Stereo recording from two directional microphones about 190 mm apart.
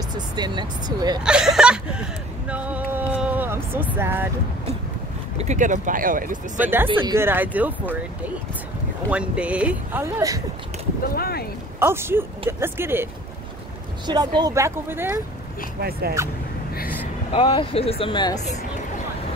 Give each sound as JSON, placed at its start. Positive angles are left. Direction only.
{"t": 0.4, "sound": "speech", "side_deg": -20}
{"t": 1.2, "sound": "speech", "side_deg": -5}
{"t": 3.1, "sound": "a sound", "side_deg": -5}
{"t": 5.4, "sound": "speech", "side_deg": -40}
{"t": 6.6, "sound": "speech", "side_deg": -10}
{"t": 9.1, "sound": "speech", "side_deg": -5}
{"t": 11.1, "sound": "speech", "side_deg": 55}
{"t": 11.8, "sound": "speech", "side_deg": -15}
{"t": 15.8, "sound": "speech", "side_deg": -55}
{"t": 17.3, "sound": "speech", "side_deg": 30}